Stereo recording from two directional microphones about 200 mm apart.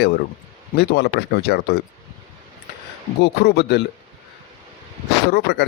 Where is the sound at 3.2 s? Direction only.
55° left (ahead or behind).